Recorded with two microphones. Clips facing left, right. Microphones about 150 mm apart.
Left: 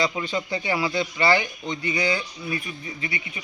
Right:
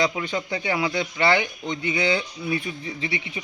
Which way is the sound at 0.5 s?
5° left (ahead or behind).